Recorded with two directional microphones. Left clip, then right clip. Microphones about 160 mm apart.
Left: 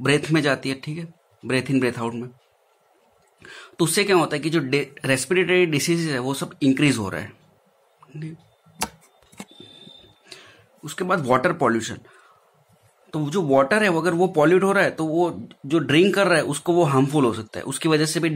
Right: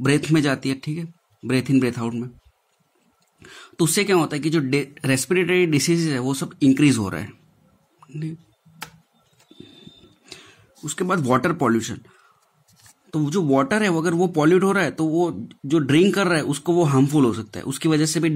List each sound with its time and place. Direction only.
0.0 s speech: 35° right (ahead or behind)
3.3 s speech: 35° right (ahead or behind)
10.2 s speech: 30° right (ahead or behind)